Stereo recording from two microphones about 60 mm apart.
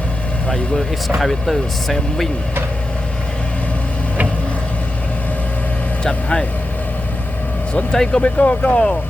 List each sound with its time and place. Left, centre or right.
1.2 s speech: centre
6.0 s vehicle: centre
7.9 s speech: centre